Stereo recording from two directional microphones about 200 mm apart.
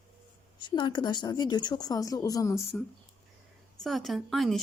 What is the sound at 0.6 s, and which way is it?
Speech, 20° left (ahead or behind).